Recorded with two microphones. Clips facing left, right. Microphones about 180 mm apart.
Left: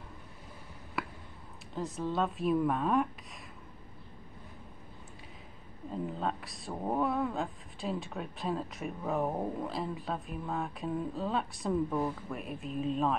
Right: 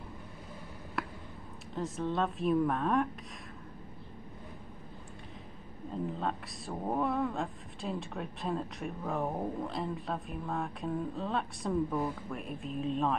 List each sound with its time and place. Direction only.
1.0 s a sound: centre (ahead or behind)
1.8 s speech: centre (ahead or behind)
6.0 s speech: centre (ahead or behind)